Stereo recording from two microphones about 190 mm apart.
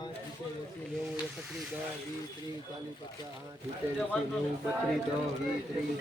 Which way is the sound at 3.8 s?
10° right (ahead or behind).